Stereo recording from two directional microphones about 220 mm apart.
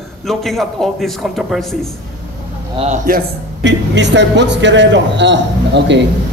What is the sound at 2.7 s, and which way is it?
Speech, 30° right (ahead or behind).